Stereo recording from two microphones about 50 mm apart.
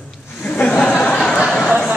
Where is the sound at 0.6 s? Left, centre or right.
Centre.